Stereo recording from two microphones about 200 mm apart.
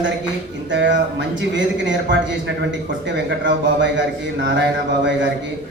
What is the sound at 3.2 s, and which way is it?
Speech, 65° right (ahead or behind).